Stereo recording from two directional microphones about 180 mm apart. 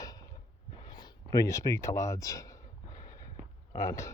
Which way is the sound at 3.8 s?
15° left (ahead or behind).